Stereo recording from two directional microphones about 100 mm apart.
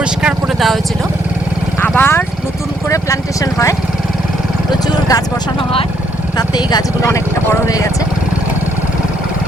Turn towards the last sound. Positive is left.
turn(degrees=35)  # may be behind; listen again after turning